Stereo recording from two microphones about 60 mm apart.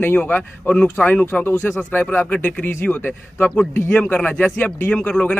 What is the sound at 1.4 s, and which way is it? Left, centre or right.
Speech, left.